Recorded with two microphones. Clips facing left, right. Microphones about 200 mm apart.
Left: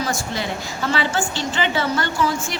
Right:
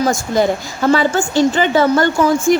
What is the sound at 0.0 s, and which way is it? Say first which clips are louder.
A woman's voice: right 10 dB; 45° right (ahead or behind).